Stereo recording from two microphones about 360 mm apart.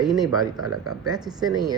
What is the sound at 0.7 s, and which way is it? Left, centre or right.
Mantra, right.